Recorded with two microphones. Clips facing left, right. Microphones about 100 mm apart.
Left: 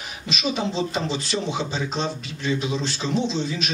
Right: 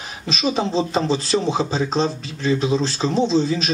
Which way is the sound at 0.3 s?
35° right (ahead or behind).